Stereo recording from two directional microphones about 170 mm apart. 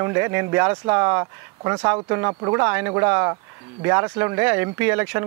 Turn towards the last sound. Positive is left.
turn(degrees=-15)  # may be behind; listen again after turning